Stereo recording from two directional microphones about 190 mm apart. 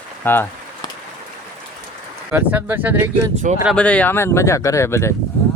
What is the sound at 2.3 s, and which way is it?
Speech, 10° right (ahead or behind).